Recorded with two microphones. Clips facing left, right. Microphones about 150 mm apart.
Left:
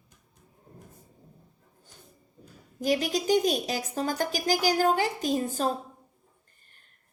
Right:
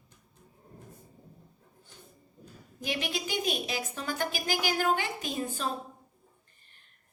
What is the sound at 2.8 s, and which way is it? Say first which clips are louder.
A woman's voice: left 8 dB; 40° left (ahead or behind).